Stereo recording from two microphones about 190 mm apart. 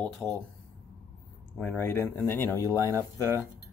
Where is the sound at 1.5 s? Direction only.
5° left (ahead or behind).